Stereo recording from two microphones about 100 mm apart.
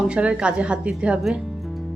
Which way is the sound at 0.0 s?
10° right (ahead or behind).